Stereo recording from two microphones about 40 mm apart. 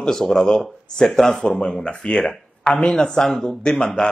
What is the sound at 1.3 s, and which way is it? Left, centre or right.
Speech, left.